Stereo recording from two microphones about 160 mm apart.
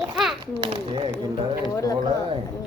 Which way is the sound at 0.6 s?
30° right (ahead or behind).